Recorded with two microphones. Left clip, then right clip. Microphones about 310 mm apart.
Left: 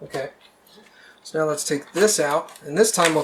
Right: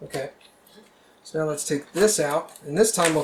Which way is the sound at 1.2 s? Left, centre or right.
Centre.